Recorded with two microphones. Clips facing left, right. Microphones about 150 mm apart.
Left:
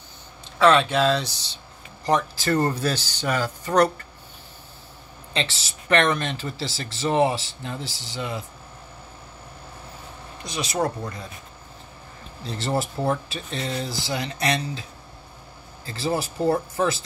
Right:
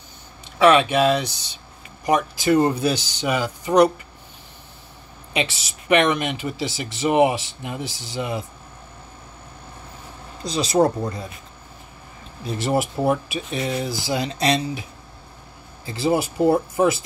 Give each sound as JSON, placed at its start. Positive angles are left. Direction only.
{"t": 0.6, "sound": "speech", "side_deg": -15}
{"t": 5.3, "sound": "speech", "side_deg": -15}
{"t": 10.4, "sound": "speech", "side_deg": -35}
{"t": 12.6, "sound": "speech", "side_deg": -15}
{"t": 15.8, "sound": "speech", "side_deg": -15}